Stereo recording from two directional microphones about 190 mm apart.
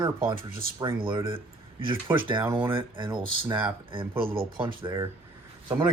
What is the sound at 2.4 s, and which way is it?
Speech, 10° right (ahead or behind).